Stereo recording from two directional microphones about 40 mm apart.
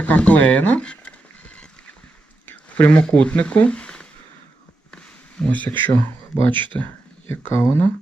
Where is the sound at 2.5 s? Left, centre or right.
Left.